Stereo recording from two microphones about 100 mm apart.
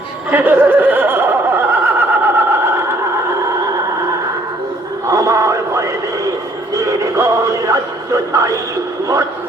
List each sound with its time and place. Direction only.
0.3 s a sound: 20° right (ahead or behind)
5.0 s radio: 35° right (ahead or behind)
6.7 s music: 35° right (ahead or behind)